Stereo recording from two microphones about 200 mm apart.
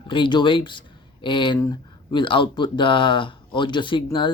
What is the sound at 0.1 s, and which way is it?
Speech, 25° left (ahead or behind).